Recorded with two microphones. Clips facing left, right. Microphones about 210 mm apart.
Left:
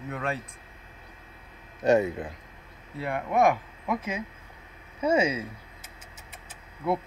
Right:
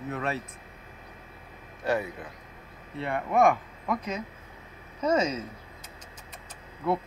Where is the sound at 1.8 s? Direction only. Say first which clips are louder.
Left 7 dB; 25° left (ahead or behind).